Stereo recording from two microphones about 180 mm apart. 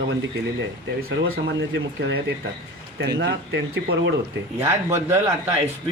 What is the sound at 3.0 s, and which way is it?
Speech, 70° right (ahead or behind).